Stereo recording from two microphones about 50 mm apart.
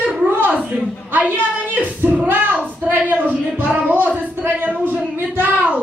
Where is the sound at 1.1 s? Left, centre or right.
Right.